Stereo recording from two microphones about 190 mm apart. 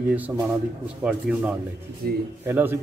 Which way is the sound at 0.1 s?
10° right (ahead or behind).